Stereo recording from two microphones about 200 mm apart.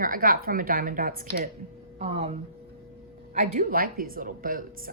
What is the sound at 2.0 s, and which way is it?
A woman's voice, 30° right (ahead or behind).